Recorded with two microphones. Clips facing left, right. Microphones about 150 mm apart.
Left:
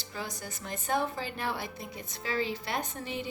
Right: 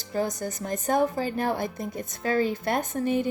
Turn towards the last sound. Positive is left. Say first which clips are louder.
# right 10 dB
turn(degrees=-50)  # may be behind; listen again after turning